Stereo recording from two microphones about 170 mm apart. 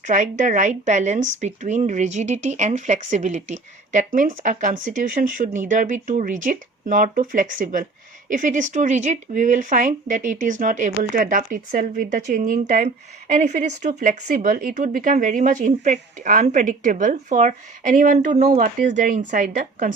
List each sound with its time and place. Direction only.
0.1 s speech: 45° right (ahead or behind)